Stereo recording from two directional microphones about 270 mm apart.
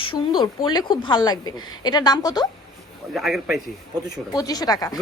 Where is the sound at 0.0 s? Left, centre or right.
Centre.